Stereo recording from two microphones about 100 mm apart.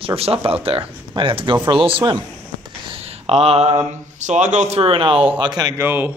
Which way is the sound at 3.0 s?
90° right.